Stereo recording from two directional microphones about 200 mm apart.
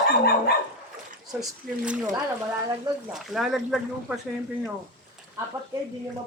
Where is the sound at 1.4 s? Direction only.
5° right (ahead or behind).